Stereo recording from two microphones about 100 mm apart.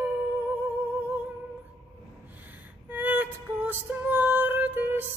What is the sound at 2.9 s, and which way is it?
Music, 15° right (ahead or behind).